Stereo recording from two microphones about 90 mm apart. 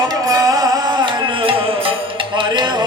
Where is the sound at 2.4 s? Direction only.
55° right (ahead or behind).